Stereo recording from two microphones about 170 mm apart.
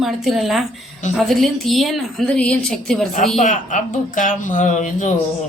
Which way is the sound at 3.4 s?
45° left (ahead or behind).